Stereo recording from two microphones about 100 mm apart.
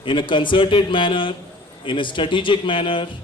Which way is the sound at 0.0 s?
55° left (ahead or behind).